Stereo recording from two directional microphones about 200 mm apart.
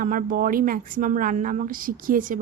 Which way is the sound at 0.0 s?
45° right (ahead or behind).